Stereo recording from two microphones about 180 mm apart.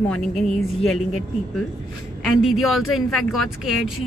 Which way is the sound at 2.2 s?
Centre (ahead or behind).